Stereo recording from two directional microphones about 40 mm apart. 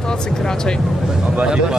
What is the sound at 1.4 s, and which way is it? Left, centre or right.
Speech, centre.